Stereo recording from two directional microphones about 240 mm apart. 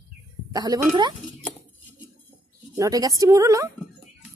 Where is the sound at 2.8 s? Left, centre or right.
Centre.